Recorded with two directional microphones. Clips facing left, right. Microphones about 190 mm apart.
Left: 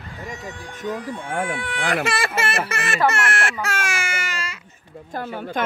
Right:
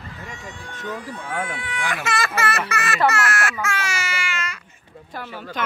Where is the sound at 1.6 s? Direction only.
55° left (ahead or behind).